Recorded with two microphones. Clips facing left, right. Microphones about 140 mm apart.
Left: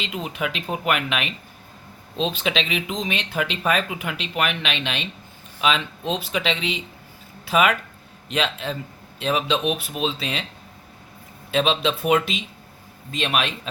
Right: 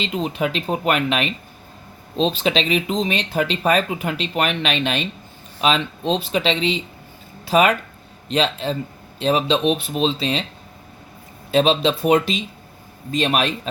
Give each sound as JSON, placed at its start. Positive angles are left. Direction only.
{"t": 0.0, "sound": "speech", "side_deg": -30}
{"t": 11.5, "sound": "speech", "side_deg": -35}